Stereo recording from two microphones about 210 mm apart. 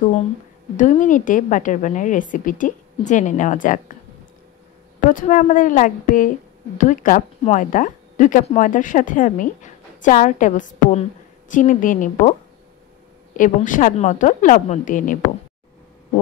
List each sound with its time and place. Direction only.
0.7 s a woman's voice: 35° left (ahead or behind)
5.1 s a woman's voice: 40° left (ahead or behind)
13.4 s a woman's voice: 40° left (ahead or behind)